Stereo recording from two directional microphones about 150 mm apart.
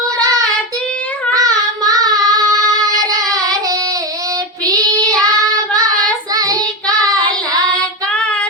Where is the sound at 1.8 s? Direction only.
25° right (ahead or behind).